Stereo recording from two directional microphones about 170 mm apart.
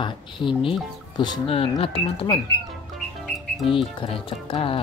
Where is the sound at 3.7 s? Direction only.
30° left (ahead or behind).